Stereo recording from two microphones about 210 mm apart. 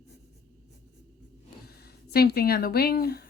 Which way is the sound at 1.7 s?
50° left (ahead or behind).